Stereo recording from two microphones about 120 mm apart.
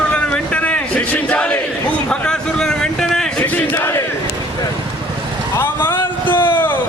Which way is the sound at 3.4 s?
15° left (ahead or behind).